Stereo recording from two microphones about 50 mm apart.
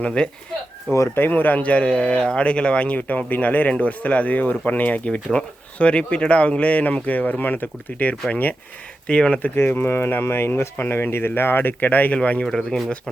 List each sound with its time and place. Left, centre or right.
0.0 s speech: centre
1.1 s speech: left
9.0 s speech: left
9.4 s speech: left
12.5 s speech: centre